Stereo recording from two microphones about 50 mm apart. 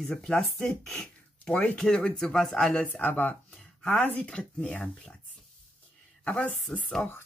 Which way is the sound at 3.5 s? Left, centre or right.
Centre.